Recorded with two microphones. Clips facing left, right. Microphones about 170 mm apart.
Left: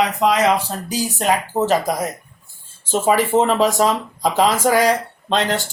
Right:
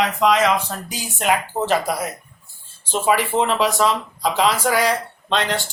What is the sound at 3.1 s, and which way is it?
Speech, 45° left (ahead or behind).